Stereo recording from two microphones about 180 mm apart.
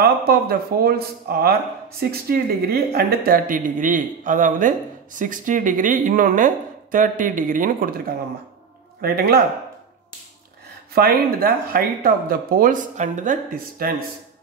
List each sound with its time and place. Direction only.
0.0 s speech: 60° right (ahead or behind)
9.0 s speech: 55° right (ahead or behind)
11.0 s speech: 55° right (ahead or behind)